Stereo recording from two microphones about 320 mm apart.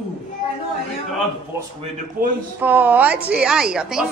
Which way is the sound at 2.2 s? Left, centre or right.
Right.